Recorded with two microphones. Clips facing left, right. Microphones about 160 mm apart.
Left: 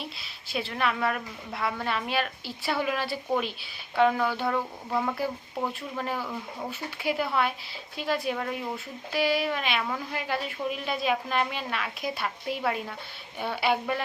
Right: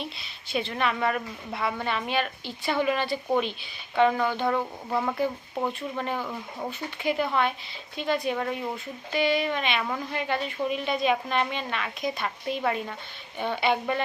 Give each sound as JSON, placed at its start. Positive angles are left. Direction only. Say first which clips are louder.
{"t": 0.0, "sound": "a woman's voice", "louder": "right 3 dB", "side_deg": 5}